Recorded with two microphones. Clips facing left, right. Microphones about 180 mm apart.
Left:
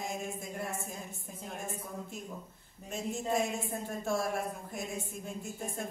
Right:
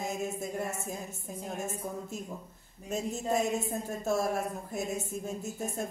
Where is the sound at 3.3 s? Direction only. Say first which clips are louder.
Right 4 dB; 40° right (ahead or behind).